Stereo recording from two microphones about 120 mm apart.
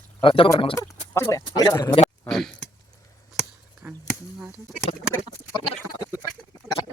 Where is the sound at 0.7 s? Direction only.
25° left (ahead or behind).